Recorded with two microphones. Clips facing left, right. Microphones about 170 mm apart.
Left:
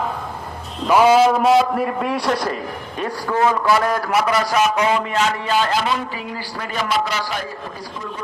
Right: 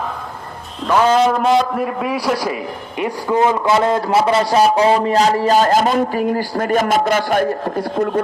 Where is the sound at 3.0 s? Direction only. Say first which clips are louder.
Right 3 dB; 20° right (ahead or behind).